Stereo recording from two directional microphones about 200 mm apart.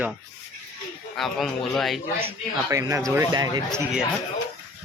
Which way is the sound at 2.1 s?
15° right (ahead or behind).